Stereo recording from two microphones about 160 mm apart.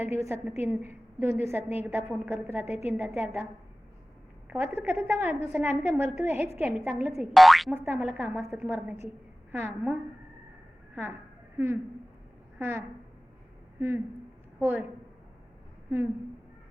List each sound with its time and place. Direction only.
0.0 s a woman's voice: 15° right (ahead or behind)
2.6 s a woman's voice: 40° left (ahead or behind)
3.0 s a woman's voice: 10° right (ahead or behind)
4.4 s a woman's voice: 10° right (ahead or behind)
7.3 s boing: centre (ahead or behind)
7.7 s a woman's voice: 10° right (ahead or behind)
11.5 s a woman's voice: 15° right (ahead or behind)